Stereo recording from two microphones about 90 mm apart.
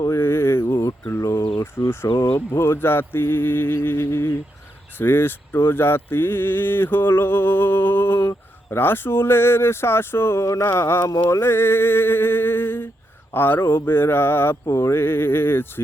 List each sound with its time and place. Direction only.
0.1 s a sound: 25° left (ahead or behind)
1.5 s speech: 30° left (ahead or behind)
11.3 s music: 25° left (ahead or behind)
13.3 s speech: 25° left (ahead or behind)